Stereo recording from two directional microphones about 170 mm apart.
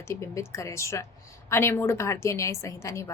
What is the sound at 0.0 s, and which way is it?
A woman's voice, 15° left (ahead or behind).